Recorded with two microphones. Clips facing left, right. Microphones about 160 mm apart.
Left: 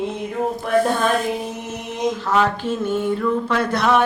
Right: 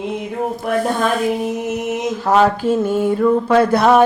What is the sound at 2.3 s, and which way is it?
Mantra, 40° right (ahead or behind).